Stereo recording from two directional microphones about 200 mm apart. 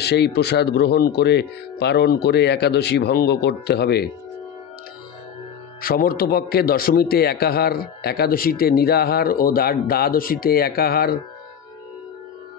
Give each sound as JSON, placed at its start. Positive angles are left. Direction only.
{"t": 0.0, "sound": "speech", "side_deg": 55}
{"t": 5.8, "sound": "a man's voice", "side_deg": 45}